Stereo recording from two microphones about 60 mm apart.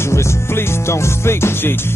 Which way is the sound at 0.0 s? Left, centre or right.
Left.